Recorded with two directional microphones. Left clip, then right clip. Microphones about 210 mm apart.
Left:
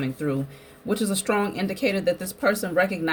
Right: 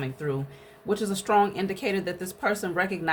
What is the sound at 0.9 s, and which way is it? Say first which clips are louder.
Speech: left 1 dB; 10° right (ahead or behind).